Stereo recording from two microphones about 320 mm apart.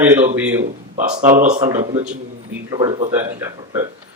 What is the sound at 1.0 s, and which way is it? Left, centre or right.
Speech, right.